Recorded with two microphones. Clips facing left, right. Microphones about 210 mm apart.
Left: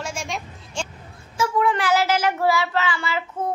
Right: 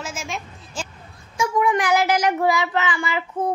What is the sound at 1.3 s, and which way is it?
Child singing, 15° right (ahead or behind).